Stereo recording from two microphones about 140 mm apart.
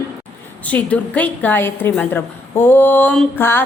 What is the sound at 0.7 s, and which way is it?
A woman's voice, 10° left (ahead or behind).